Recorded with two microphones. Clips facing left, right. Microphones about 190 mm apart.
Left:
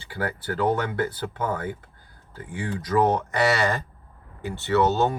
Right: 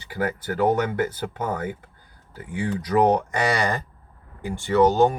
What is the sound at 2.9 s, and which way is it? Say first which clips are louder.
Speech: right 2 dB; 15° right (ahead or behind).